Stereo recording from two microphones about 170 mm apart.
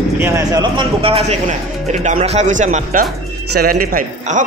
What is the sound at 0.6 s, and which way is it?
A man's voice, 30° right (ahead or behind).